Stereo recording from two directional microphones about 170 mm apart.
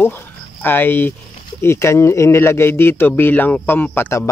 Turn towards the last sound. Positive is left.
turn(degrees=10)  # may be behind; listen again after turning